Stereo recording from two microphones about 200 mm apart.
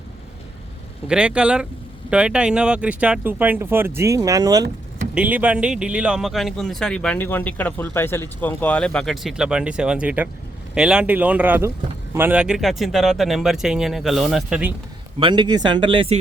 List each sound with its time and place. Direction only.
1.0 s speech: 5° right (ahead or behind)
15.2 s speech: 25° right (ahead or behind)